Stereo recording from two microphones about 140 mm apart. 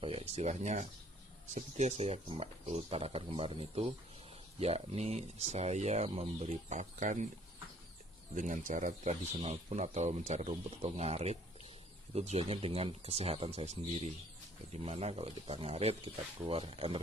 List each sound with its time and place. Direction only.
0.0 s speech: 45° right (ahead or behind); by 7.2 s 65° right (ahead or behind)
8.4 s speech: 65° right (ahead or behind); by 17.0 s 40° right (ahead or behind)